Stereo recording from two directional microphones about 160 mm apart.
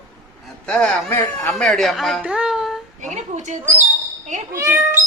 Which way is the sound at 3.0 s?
50° right (ahead or behind).